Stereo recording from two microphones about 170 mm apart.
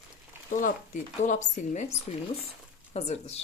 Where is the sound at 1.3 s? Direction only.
45° left (ahead or behind).